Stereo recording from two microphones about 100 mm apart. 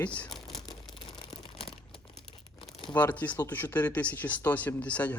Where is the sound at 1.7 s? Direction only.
55° left (ahead or behind).